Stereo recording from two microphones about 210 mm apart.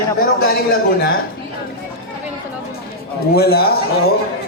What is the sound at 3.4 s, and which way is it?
Speech, 50° left (ahead or behind).